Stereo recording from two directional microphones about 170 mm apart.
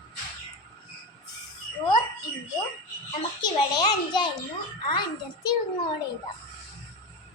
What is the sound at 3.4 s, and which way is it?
A child's voice, 25° left (ahead or behind).